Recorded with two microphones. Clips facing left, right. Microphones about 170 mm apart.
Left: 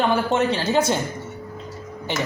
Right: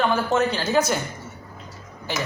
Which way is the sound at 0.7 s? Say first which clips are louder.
Left 1 dB; 25° left (ahead or behind).